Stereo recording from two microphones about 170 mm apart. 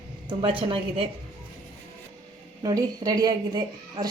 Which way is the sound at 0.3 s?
30° right (ahead or behind).